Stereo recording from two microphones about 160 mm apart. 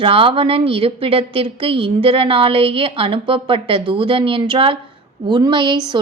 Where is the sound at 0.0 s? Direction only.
35° right (ahead or behind).